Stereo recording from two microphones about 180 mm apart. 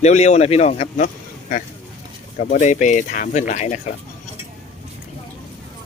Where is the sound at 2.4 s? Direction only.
40° left (ahead or behind).